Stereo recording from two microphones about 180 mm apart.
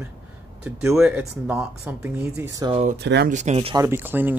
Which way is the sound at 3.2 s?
40° right (ahead or behind).